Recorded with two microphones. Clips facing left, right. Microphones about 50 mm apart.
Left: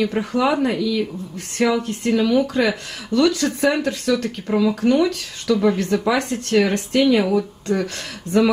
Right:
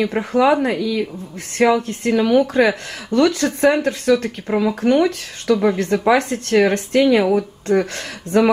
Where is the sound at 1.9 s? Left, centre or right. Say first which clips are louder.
Right 2 dB; right.